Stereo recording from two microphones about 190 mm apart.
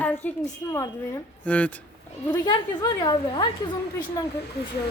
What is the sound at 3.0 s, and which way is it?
Speech, 20° left (ahead or behind).